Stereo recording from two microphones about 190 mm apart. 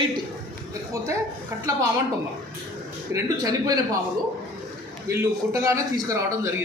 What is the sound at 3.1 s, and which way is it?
Speech, 20° right (ahead or behind).